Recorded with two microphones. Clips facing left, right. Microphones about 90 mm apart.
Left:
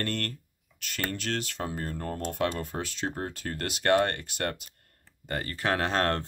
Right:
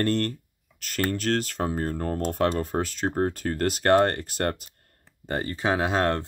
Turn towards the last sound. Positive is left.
turn(degrees=-10)  # may be behind; listen again after turning